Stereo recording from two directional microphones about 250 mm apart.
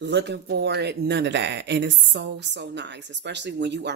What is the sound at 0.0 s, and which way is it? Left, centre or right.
Speech, right.